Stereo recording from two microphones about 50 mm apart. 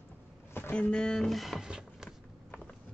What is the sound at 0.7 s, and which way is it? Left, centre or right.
Speech, left.